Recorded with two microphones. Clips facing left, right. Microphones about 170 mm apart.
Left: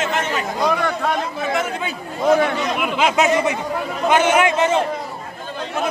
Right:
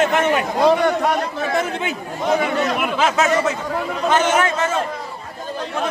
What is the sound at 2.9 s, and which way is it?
A man's voice, 15° left (ahead or behind).